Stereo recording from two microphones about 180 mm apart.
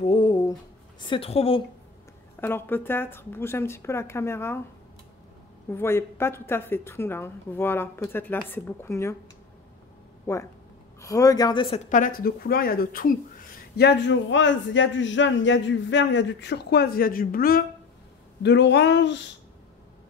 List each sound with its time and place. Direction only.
0.0 s a sound: 30° left (ahead or behind)
1.0 s a woman's voice: 30° left (ahead or behind)
2.4 s a woman's voice: 10° left (ahead or behind)
5.7 s a woman's voice: 15° left (ahead or behind)
10.2 s speech: 15° left (ahead or behind); by 13.1 s 55° left (ahead or behind)
13.7 s a man's voice: 75° left (ahead or behind); by 17.6 s 55° left (ahead or behind)
18.4 s speech: 75° left (ahead or behind)